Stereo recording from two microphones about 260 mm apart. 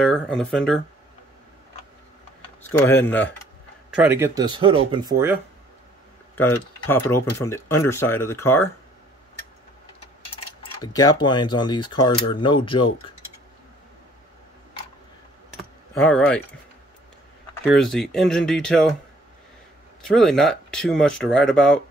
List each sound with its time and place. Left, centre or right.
0.0 s speech: centre
2.8 s speech: centre
4.0 s speech: centre
6.3 s speech: centre
10.8 s speech: centre
16.0 s speech: centre
17.6 s speech: centre
20.0 s speech: centre